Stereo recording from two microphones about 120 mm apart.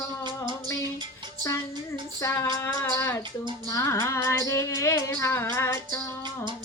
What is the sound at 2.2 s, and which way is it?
Child singing, 20° left (ahead or behind).